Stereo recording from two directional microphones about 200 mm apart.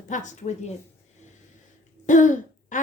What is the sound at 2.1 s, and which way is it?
Throat clearing, 40° left (ahead or behind).